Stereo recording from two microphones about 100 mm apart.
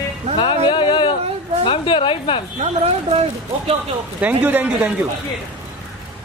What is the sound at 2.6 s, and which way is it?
Speech, 90° right.